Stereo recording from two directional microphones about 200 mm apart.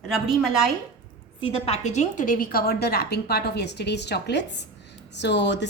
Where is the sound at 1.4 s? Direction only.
30° left (ahead or behind).